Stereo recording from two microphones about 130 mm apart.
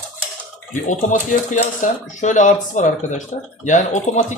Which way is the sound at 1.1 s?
75° left (ahead or behind).